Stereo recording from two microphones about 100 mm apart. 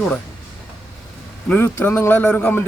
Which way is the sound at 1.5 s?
20° left (ahead or behind).